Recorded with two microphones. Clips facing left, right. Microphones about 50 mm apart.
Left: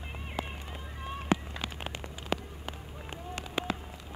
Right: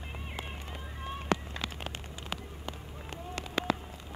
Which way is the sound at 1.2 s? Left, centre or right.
Left.